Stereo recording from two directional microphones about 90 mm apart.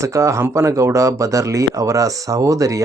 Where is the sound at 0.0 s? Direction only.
35° right (ahead or behind).